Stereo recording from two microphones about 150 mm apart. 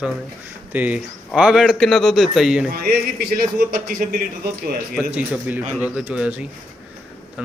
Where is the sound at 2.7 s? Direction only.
90° right.